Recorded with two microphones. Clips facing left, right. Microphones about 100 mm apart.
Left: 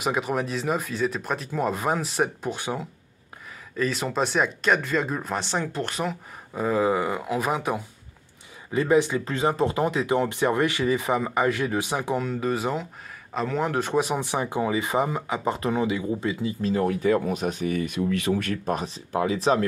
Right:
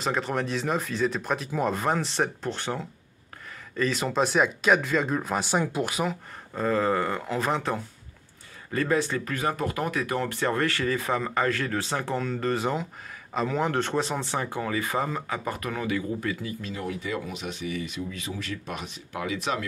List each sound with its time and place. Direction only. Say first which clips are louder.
0.0 s speech: left 2 dB; 10° left (ahead or behind)
6.5 s speech: left 2 dB; 10° left (ahead or behind)
16.6 s speech: left 13 dB; 40° left (ahead or behind)
18.7 s speech: left 8 dB; 35° left (ahead or behind)